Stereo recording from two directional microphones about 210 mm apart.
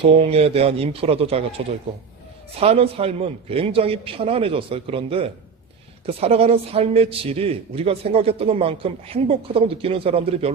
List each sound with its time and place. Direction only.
0.0 s a man's voice: 30° right (ahead or behind)